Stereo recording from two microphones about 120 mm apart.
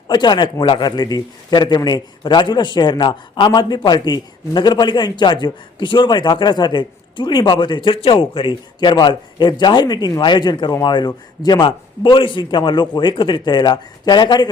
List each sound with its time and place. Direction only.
0.1 s a man's voice: 35° left (ahead or behind)